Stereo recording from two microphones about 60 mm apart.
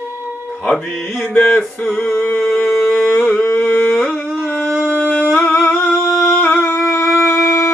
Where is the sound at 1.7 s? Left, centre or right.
Left.